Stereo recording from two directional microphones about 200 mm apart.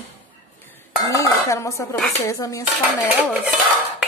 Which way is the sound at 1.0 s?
15° left (ahead or behind).